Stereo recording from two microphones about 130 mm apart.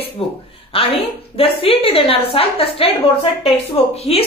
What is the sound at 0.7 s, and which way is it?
A woman's voice, 45° left (ahead or behind).